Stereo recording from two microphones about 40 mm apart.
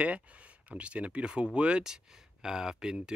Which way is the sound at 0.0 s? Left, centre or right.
Right.